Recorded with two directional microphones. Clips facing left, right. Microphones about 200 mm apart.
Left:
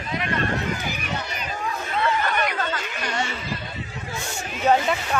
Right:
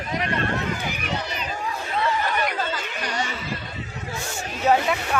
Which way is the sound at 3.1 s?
15° right (ahead or behind).